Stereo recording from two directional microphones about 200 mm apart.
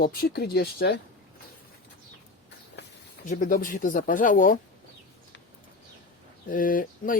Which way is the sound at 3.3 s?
40° left (ahead or behind).